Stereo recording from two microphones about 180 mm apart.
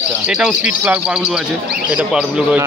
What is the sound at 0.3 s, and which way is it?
Speech, 5° right (ahead or behind).